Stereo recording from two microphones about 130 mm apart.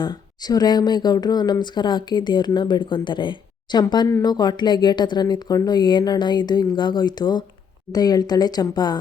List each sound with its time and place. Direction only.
0.0 s speech: 35° left (ahead or behind)